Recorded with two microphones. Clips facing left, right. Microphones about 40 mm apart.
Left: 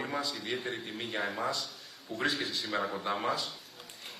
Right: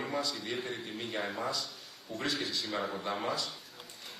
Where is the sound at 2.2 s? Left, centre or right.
Left.